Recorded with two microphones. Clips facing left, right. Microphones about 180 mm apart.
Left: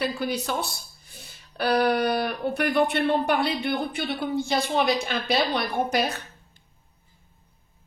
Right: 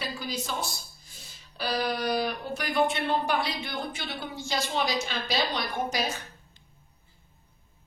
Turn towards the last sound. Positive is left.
turn(degrees=60)  # may be behind; listen again after turning